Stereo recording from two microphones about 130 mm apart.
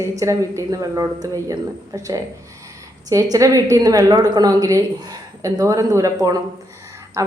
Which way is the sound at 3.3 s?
25° right (ahead or behind).